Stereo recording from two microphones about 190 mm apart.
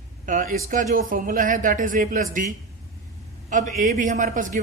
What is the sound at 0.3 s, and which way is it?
A man's voice, 45° right (ahead or behind).